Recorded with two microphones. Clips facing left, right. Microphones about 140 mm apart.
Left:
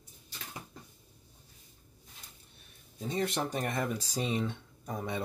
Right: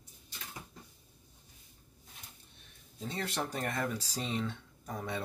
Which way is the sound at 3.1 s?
20° left (ahead or behind).